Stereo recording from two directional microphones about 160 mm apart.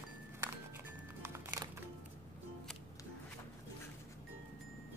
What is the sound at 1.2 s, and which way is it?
Music, 20° right (ahead or behind).